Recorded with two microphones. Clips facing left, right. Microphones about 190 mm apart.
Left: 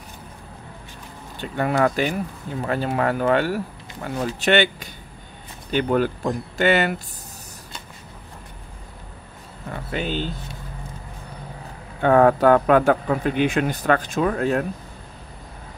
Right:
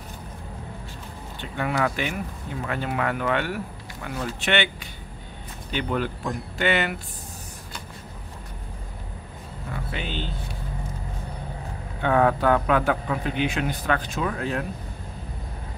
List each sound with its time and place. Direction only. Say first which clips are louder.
1.4 s a man's voice: left 5 dB; 40° left (ahead or behind)
9.9 s a man's voice: left 8 dB; 45° left (ahead or behind)
12.0 s a man's voice: left 5 dB; 45° left (ahead or behind)